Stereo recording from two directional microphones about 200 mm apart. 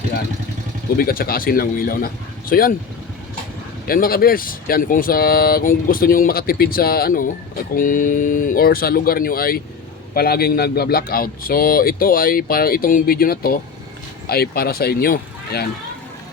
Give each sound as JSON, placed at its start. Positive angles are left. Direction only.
{"t": 0.9, "sound": "speech", "side_deg": 45}
{"t": 3.8, "sound": "speech", "side_deg": 45}